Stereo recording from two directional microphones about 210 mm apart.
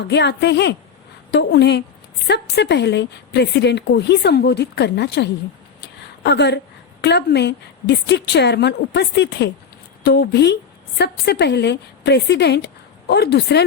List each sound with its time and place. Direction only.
0.0 s speech: 55° left (ahead or behind)
5.8 s a sound: 55° left (ahead or behind)
7.0 s a woman's voice: 50° left (ahead or behind)